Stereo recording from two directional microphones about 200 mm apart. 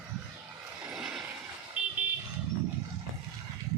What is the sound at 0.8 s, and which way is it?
Vehicle, centre (ahead or behind).